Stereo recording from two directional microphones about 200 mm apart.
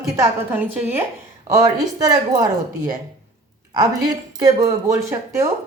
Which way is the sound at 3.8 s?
20° right (ahead or behind).